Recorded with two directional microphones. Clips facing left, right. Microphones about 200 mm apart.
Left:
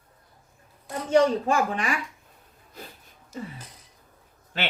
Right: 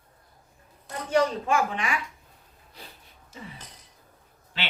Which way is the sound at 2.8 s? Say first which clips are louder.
Left 5 dB; 45° left (ahead or behind).